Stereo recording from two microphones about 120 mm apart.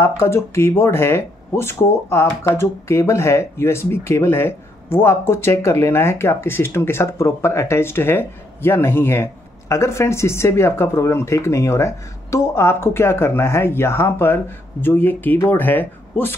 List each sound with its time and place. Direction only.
0.0 s speech: 20° left (ahead or behind)